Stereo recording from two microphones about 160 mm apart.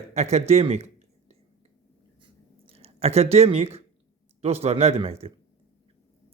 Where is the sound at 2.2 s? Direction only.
35° right (ahead or behind).